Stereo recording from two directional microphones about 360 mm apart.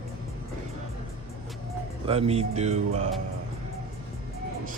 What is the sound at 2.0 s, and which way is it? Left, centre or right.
Speech, centre.